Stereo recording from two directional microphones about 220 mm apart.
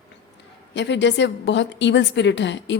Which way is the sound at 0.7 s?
55° left (ahead or behind).